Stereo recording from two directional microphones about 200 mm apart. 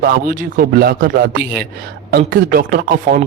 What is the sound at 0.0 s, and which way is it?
Speech, 45° right (ahead or behind).